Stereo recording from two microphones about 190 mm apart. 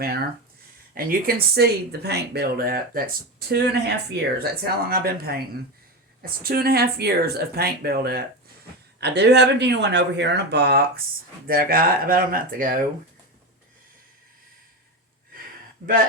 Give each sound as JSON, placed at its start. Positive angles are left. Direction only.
{"t": 0.9, "sound": "speech", "side_deg": -55}